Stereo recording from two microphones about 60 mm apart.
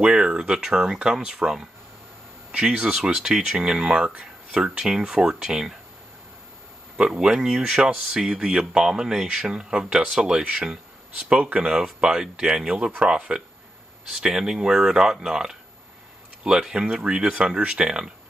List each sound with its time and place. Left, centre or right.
0.0 s speech: centre
7.0 s speech: centre